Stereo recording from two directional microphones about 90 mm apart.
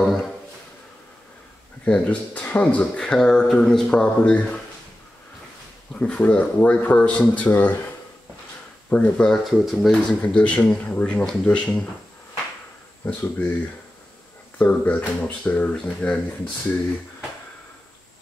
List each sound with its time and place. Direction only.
0.0 s a sound: centre (ahead or behind)
1.9 s speech: 15° left (ahead or behind)
5.9 s speech: 15° left (ahead or behind)
8.9 s speech: 10° left (ahead or behind)
9.4 s speech: centre (ahead or behind)
10.2 s speech: 10° left (ahead or behind)
13.0 s speech: 20° left (ahead or behind)
14.6 s speech: 20° left (ahead or behind)